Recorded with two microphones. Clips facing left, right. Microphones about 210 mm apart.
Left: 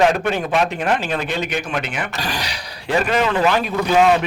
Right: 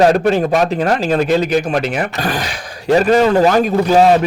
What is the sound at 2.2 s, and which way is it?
Speech, 50° right (ahead or behind).